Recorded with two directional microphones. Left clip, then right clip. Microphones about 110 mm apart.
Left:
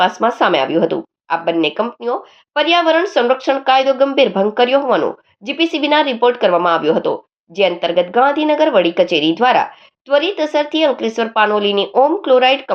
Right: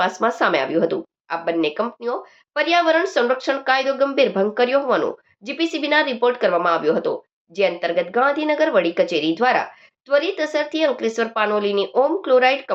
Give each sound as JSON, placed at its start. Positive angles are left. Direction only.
{"t": 0.0, "sound": "speech", "side_deg": 20}